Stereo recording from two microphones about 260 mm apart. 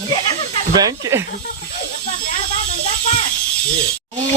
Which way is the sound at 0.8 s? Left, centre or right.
Centre.